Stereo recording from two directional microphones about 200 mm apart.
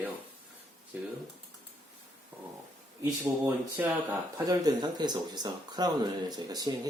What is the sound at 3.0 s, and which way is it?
Speech, 10° right (ahead or behind).